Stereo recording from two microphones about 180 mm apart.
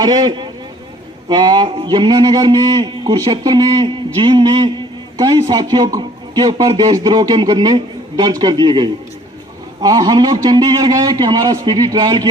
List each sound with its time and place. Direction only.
0.0 s a man's voice: 20° right (ahead or behind)